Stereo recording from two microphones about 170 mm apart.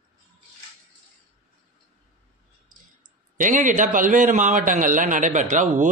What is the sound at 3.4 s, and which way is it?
A man's voice, 50° right (ahead or behind).